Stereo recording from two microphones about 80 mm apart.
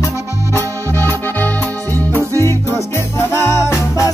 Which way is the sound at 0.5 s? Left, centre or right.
Left.